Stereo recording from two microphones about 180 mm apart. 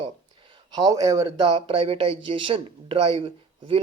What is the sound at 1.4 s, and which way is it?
Speech, 35° right (ahead or behind).